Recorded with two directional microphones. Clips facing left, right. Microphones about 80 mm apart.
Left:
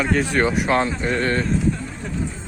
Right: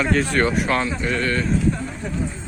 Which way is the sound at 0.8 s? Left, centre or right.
Left.